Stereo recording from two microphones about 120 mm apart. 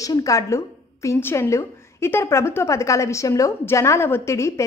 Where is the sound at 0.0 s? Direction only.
30° left (ahead or behind).